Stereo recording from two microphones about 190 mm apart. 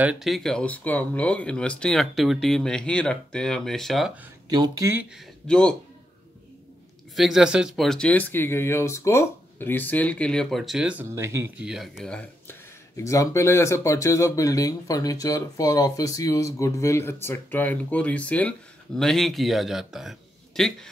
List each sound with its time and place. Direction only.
0.0 s speech: 5° right (ahead or behind)
4.5 s speech: 20° right (ahead or behind)
5.5 s speech: 5° left (ahead or behind)
7.2 s speech: centre (ahead or behind)